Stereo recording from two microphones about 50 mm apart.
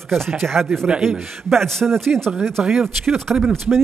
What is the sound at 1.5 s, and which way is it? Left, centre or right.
Speech, centre.